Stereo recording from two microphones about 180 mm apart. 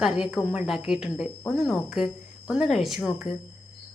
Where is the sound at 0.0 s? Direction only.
5° right (ahead or behind).